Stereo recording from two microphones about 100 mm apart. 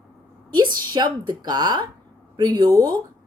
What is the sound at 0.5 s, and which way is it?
A woman's voice, 45° right (ahead or behind).